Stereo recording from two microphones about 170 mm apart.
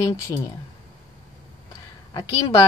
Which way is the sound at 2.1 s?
20° left (ahead or behind).